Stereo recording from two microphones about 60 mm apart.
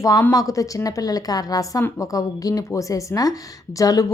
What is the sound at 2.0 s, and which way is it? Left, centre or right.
Speech, left.